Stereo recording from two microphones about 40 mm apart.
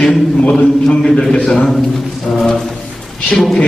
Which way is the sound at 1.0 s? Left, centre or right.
Centre.